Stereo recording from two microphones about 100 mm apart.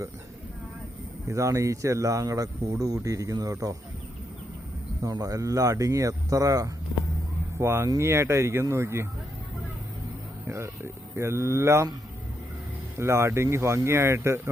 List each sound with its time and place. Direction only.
1.3 s speech: 30° right (ahead or behind)
5.1 s speech: 35° right (ahead or behind)
10.4 s speech: 25° right (ahead or behind)
13.0 s speech: 25° right (ahead or behind)